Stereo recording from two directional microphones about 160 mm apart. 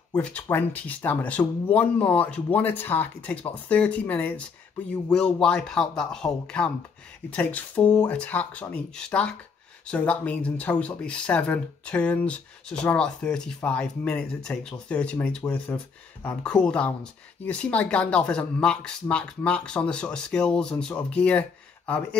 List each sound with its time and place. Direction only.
0.1 s speech: 10° left (ahead or behind)